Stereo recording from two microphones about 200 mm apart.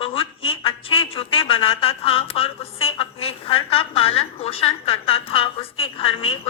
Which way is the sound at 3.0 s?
30° left (ahead or behind).